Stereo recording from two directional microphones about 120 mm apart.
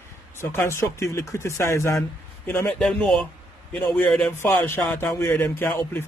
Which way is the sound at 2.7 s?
5° left (ahead or behind).